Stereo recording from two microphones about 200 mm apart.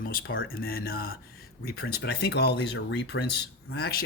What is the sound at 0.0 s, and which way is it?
Speech, 45° left (ahead or behind).